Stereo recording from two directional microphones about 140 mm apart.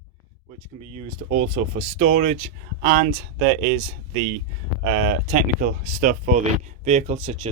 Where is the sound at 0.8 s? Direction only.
50° right (ahead or behind).